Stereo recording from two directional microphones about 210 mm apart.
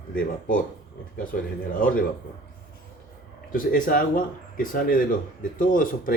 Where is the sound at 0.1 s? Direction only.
40° left (ahead or behind).